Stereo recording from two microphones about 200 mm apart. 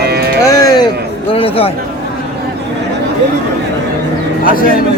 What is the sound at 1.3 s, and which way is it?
Speech, 30° left (ahead or behind).